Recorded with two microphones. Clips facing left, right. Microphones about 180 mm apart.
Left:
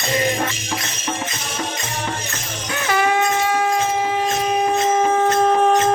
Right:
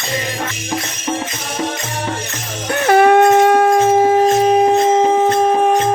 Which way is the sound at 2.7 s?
55° right (ahead or behind).